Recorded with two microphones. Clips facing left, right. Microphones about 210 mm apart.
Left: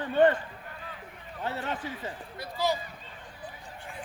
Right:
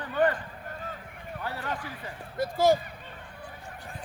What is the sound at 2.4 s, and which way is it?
Speech, 50° right (ahead or behind).